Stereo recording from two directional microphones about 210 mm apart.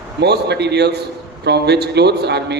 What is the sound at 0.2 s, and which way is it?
A man's voice, 55° right (ahead or behind).